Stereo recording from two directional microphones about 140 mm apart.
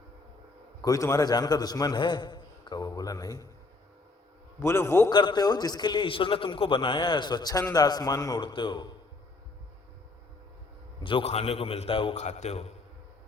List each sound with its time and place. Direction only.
0.8 s a man's voice: 25° left (ahead or behind)
4.6 s a man's voice: 20° left (ahead or behind)
5.1 s a man's voice: 30° left (ahead or behind)
11.0 s a man's voice: 40° left (ahead or behind)
12.1 s a man's voice: 55° left (ahead or behind)